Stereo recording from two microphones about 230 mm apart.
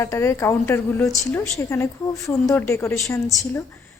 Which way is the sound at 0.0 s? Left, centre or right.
Centre.